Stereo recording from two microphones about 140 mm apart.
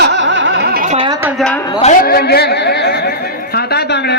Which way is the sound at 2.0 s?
90° left.